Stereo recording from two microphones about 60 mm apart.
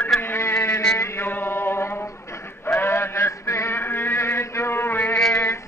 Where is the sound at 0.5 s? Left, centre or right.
Left.